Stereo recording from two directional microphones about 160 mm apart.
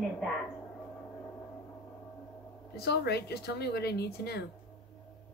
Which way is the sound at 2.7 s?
90° left.